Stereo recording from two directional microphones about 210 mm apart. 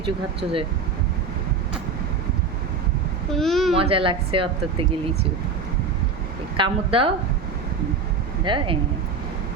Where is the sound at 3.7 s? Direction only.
25° right (ahead or behind).